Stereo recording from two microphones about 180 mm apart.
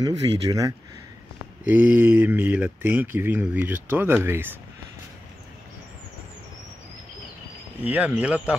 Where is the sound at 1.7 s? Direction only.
10° right (ahead or behind).